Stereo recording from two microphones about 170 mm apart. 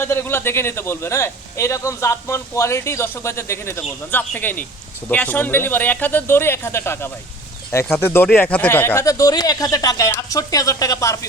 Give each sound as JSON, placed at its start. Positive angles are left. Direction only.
{"t": 0.0, "sound": "a man's voice", "side_deg": 15}